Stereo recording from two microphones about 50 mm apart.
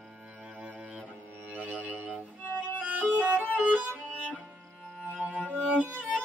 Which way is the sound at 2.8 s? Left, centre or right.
Right.